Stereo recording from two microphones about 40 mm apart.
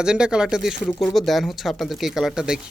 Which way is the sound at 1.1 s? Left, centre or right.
Centre.